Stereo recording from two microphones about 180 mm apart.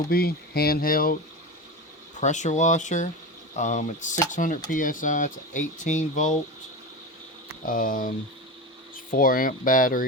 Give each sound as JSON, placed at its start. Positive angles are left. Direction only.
{"t": 0.1, "sound": "speech", "side_deg": 60}
{"t": 2.2, "sound": "speech", "side_deg": 40}
{"t": 7.6, "sound": "speech", "side_deg": 50}
{"t": 9.1, "sound": "speech", "side_deg": 50}